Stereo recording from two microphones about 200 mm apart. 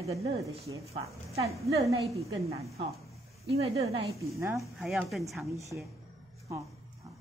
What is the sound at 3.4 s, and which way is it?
Speech, 30° right (ahead or behind).